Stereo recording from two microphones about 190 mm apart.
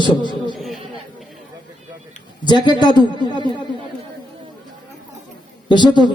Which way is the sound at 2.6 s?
25° left (ahead or behind).